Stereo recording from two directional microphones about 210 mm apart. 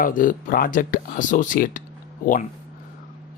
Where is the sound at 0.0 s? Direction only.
40° left (ahead or behind).